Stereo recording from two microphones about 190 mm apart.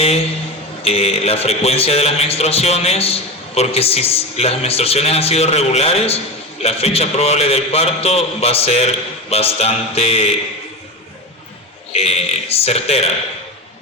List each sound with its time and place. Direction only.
0.8 s a man's voice: 30° left (ahead or behind)
11.9 s a man's voice: 35° left (ahead or behind)